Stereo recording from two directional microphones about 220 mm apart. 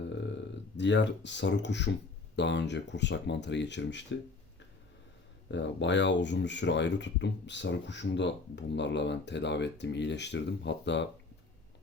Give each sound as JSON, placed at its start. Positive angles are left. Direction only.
{"t": 0.8, "sound": "speech", "side_deg": 55}
{"t": 5.5, "sound": "speech", "side_deg": 55}